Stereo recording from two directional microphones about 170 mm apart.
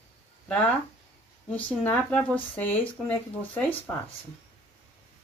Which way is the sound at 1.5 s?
10° left (ahead or behind).